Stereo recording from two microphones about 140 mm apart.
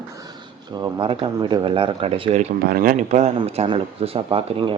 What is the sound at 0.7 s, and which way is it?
Speech, 35° right (ahead or behind).